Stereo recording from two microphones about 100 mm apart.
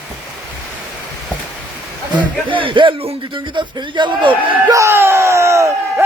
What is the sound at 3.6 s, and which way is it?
Speech, 50° right (ahead or behind).